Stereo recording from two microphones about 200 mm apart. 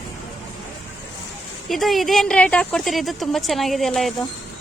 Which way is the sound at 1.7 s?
Centre (ahead or behind).